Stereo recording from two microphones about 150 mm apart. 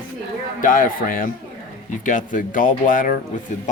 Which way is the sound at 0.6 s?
65° left (ahead or behind).